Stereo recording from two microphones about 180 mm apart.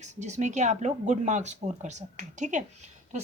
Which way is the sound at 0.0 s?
40° right (ahead or behind).